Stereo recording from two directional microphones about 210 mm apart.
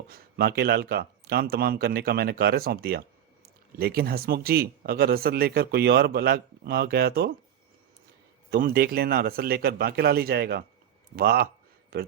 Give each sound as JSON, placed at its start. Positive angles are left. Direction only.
{"t": 0.1, "sound": "speech", "side_deg": -45}
{"t": 8.4, "sound": "speech", "side_deg": -45}